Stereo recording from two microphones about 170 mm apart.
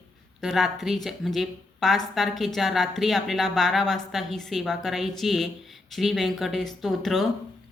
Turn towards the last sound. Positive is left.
turn(degrees=0)  # may be behind; listen again after turning